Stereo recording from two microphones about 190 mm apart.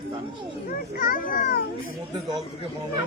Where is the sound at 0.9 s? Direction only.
50° left (ahead or behind).